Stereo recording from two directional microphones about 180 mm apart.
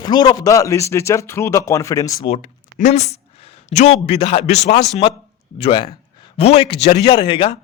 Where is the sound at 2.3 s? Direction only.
40° left (ahead or behind).